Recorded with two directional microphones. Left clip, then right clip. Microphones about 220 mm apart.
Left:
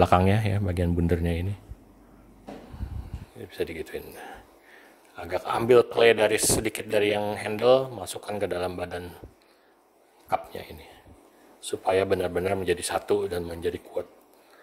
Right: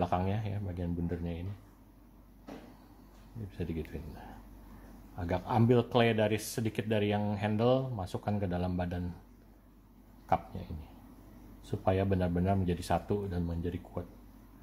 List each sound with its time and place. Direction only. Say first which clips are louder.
0.0 s speech: left 12 dB; 40° left (ahead or behind)
3.9 s speech: left 11 dB; 40° left (ahead or behind)
5.4 s speech: left 10 dB; 40° left (ahead or behind)
11.6 s speech: left 8 dB; 40° left (ahead or behind)